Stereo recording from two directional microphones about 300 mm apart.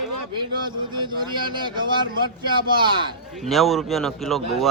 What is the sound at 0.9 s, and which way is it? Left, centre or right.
Speech, centre.